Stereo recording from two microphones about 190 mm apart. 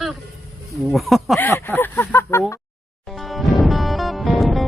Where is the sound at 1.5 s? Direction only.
10° left (ahead or behind).